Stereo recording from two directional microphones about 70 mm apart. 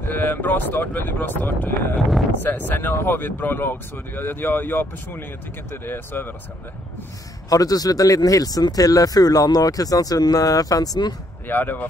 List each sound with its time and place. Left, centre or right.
0.0 s speech: left
7.4 s speech: left
11.4 s speech: left